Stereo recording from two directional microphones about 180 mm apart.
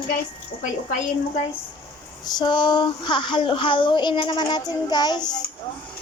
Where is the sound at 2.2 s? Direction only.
25° left (ahead or behind).